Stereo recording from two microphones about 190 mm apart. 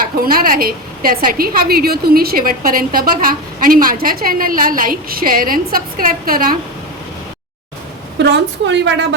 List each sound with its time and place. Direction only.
0.3 s a woman's voice: 50° right (ahead or behind)
8.2 s a woman's voice: 65° right (ahead or behind)